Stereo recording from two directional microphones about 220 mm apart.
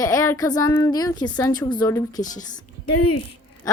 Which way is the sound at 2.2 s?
35° left (ahead or behind).